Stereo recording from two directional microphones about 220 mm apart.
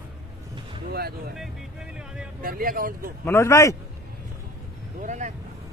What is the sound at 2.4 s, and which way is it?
Speech, 40° right (ahead or behind).